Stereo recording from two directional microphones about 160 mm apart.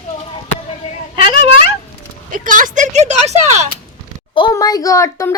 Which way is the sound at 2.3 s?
55° right (ahead or behind).